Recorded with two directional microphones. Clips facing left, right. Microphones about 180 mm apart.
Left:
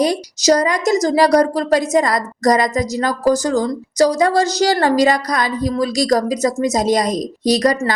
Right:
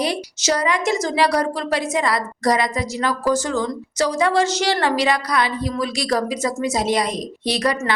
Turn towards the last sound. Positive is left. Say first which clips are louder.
# left 6 dB
turn(degrees=40)  # may be behind; listen again after turning